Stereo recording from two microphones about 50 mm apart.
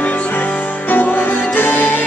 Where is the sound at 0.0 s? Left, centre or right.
Left.